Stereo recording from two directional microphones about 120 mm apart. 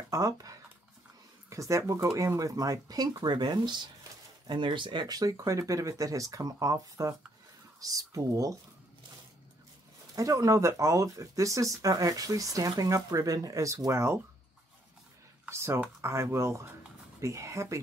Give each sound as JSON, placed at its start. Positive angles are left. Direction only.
{"t": 0.1, "sound": "speech", "side_deg": -30}
{"t": 10.1, "sound": "speech", "side_deg": -25}
{"t": 15.4, "sound": "speech", "side_deg": -20}